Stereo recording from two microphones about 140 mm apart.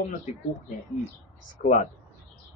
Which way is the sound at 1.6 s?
70° left (ahead or behind).